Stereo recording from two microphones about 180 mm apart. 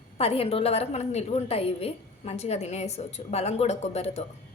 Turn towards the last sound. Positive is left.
turn(degrees=35)  # may be behind; listen again after turning